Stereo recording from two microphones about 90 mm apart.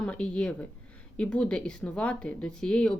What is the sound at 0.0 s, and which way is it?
A woman's voice, 10° left (ahead or behind).